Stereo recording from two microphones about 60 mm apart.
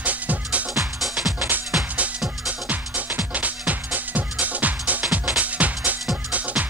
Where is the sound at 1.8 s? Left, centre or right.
Right.